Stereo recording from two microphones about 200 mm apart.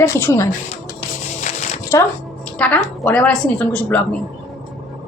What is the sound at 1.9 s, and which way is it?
Speech, 15° left (ahead or behind).